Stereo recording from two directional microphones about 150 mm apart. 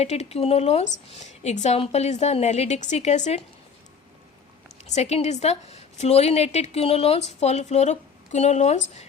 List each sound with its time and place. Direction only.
0.0 s a woman's voice: 45° left (ahead or behind)
4.9 s a woman's voice: 50° left (ahead or behind)